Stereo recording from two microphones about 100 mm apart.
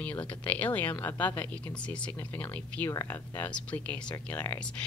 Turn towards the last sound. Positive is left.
turn(degrees=15)  # may be behind; listen again after turning